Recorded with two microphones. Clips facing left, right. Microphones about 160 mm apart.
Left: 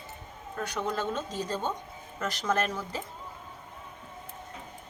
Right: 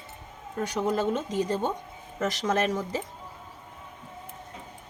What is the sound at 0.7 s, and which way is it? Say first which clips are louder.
Speech: right 5 dB; 40° right (ahead or behind).